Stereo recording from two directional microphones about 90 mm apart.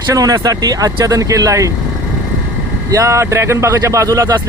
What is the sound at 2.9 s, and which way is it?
Speech, 35° right (ahead or behind).